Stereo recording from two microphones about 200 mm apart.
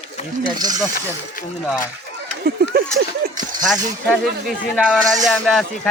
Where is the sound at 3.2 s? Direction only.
45° right (ahead or behind).